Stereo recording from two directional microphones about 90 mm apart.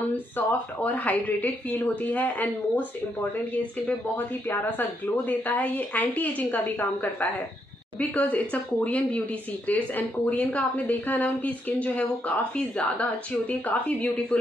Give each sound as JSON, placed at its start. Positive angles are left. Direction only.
{"t": 0.1, "sound": "a woman's voice", "side_deg": 20}
{"t": 4.6, "sound": "a woman's voice", "side_deg": 20}